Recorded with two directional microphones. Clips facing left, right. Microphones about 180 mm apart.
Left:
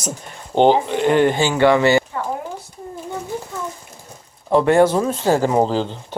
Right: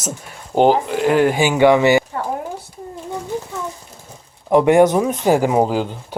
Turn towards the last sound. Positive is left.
turn(degrees=-10)  # may be behind; listen again after turning